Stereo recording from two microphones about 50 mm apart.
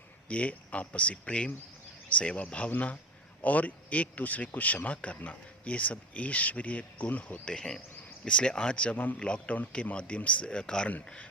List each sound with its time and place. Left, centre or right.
0.3 s speech: left
7.4 s speech: centre